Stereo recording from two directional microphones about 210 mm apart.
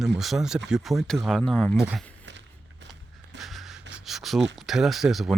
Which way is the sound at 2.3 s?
55° right (ahead or behind).